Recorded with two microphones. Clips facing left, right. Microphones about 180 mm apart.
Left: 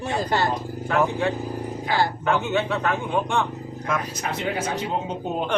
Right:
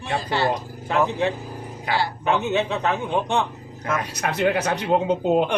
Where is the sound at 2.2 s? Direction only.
20° right (ahead or behind).